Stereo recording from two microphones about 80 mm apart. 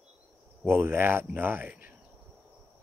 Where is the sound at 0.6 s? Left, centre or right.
Right.